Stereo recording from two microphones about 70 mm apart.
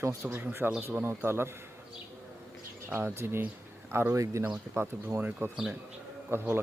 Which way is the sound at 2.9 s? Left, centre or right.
Right.